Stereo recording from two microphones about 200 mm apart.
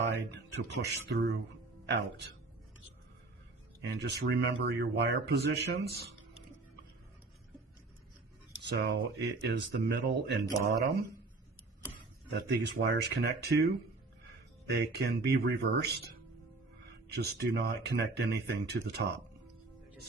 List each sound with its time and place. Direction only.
0.3 s speech: 60° right (ahead or behind)
3.8 s speech: 60° right (ahead or behind)
8.6 s speech: 60° right (ahead or behind)
12.3 s speech: 55° right (ahead or behind)
14.7 s speech: 55° right (ahead or behind)
17.1 s speech: 55° right (ahead or behind)